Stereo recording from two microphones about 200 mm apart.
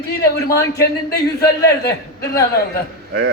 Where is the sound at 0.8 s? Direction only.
15° left (ahead or behind).